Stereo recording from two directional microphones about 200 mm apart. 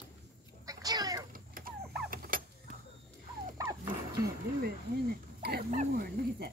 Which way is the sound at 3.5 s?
10° right (ahead or behind).